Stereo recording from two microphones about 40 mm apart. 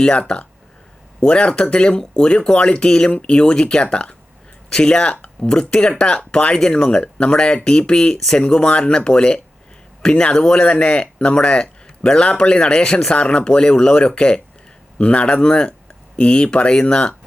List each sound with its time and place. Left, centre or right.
0.0 s speech: left